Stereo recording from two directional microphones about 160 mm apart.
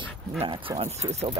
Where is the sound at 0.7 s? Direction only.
40° right (ahead or behind).